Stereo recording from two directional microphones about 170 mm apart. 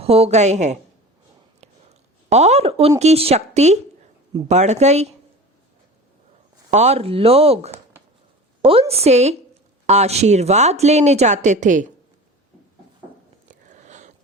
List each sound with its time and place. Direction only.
0.0 s speech: 35° right (ahead or behind)
2.3 s speech: 40° right (ahead or behind)
6.7 s speech: 40° right (ahead or behind)
13.5 s a sound: 45° right (ahead or behind)